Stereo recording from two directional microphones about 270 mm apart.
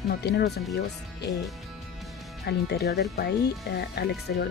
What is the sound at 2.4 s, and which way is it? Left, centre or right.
Speech, left.